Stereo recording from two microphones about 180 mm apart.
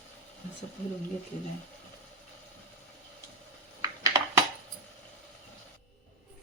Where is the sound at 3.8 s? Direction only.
20° right (ahead or behind).